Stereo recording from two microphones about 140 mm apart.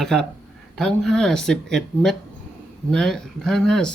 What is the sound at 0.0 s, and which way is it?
Speech, centre (ahead or behind).